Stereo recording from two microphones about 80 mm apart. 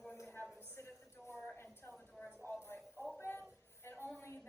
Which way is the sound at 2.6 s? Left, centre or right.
Left.